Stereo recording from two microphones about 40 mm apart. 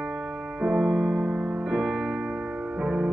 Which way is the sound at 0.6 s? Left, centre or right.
Right.